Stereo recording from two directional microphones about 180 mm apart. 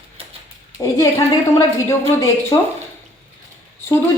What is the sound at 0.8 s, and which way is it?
A woman's voice, 15° left (ahead or behind).